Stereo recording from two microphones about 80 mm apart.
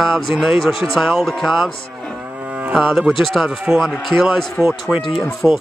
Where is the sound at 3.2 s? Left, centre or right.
Centre.